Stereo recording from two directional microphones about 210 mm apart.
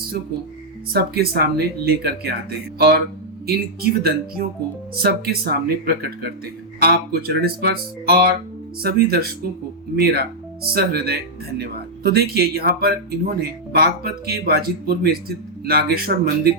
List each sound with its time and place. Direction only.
0.9 s speech: 45° right (ahead or behind)